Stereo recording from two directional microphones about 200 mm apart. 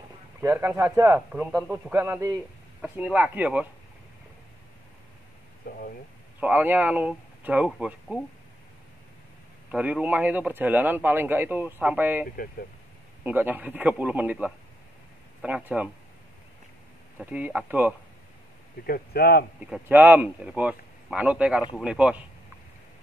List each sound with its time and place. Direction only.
0.4 s a man's voice: 10° right (ahead or behind)
5.7 s speech: 45° left (ahead or behind)
6.4 s a man's voice: 10° right (ahead or behind)
9.7 s a man's voice: 5° right (ahead or behind)
17.2 s a man's voice: 5° right (ahead or behind)
18.9 s speech: 50° left (ahead or behind)
19.6 s a man's voice: 5° right (ahead or behind)